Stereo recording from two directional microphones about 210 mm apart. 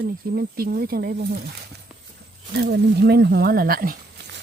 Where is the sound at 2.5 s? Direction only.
50° right (ahead or behind).